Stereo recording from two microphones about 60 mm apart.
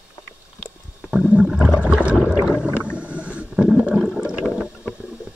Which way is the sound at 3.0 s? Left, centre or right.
Right.